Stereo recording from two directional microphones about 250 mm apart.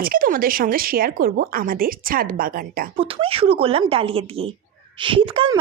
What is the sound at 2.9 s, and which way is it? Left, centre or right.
A woman's voice, right.